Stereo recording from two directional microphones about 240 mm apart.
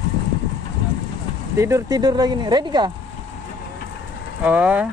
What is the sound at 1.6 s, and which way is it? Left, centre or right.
Speech, centre.